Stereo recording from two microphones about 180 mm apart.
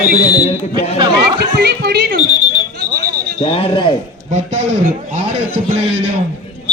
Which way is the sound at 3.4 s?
30° left (ahead or behind).